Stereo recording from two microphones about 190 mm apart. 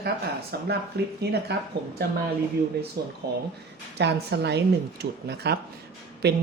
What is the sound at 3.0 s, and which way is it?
Speech, 55° right (ahead or behind).